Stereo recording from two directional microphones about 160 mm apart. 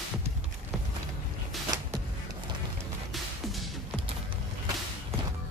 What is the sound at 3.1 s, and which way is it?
Music, centre (ahead or behind).